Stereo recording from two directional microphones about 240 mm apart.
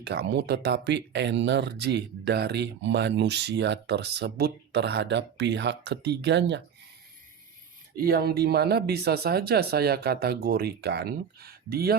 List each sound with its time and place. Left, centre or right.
0.0 s speech: right
7.9 s speech: right